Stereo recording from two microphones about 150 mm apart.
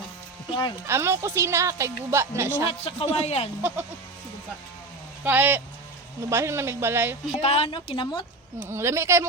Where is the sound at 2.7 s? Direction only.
40° left (ahead or behind).